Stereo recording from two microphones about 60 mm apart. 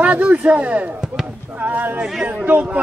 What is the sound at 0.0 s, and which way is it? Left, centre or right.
A man's voice, right.